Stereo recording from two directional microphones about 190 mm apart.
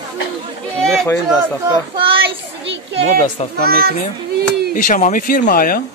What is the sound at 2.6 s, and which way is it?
Speech, 65° right (ahead or behind).